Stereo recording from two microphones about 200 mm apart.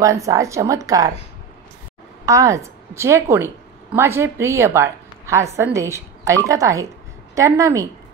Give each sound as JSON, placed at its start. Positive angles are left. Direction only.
{"t": 0.0, "sound": "speech", "side_deg": -15}
{"t": 2.2, "sound": "a woman's voice", "side_deg": -15}